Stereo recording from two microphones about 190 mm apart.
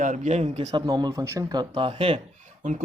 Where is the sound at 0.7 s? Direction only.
20° right (ahead or behind).